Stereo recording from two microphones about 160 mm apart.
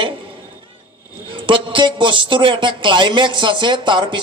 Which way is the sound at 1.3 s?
30° right (ahead or behind).